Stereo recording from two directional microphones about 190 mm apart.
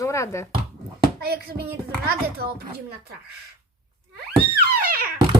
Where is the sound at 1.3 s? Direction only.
55° right (ahead or behind).